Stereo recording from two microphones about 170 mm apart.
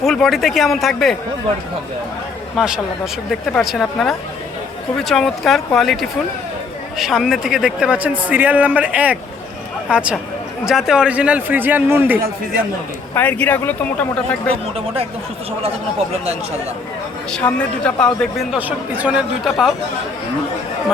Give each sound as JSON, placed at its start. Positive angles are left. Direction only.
{"t": 0.0, "sound": "a man's voice", "side_deg": 0}
{"t": 2.6, "sound": "a man's voice", "side_deg": -5}
{"t": 13.1, "sound": "speech", "side_deg": 10}
{"t": 17.3, "sound": "a man's voice", "side_deg": 5}
{"t": 18.5, "sound": "a man's voice", "side_deg": -10}